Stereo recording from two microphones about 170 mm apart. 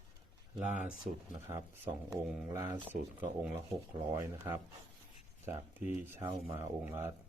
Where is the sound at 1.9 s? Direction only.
25° right (ahead or behind).